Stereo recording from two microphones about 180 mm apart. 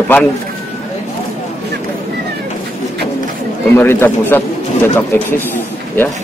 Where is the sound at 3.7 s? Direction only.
10° left (ahead or behind).